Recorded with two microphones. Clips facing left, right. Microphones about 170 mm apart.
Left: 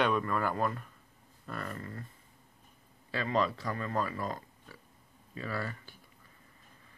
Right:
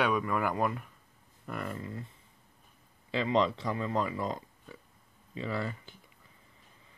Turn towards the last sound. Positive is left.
turn(degrees=-20)  # may be behind; listen again after turning